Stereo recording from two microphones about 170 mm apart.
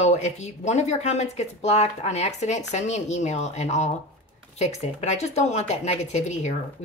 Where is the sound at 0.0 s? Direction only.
40° left (ahead or behind).